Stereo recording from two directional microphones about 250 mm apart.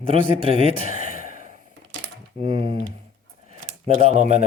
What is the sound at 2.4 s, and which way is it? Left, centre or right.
Speech, right.